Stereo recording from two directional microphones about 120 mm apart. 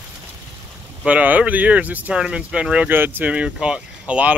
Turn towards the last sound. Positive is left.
turn(degrees=-10)  # may be behind; listen again after turning